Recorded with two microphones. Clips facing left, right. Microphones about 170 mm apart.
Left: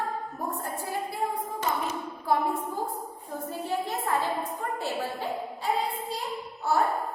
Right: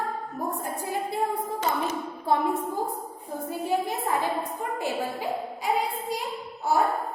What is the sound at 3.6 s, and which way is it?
A woman's voice, 10° right (ahead or behind).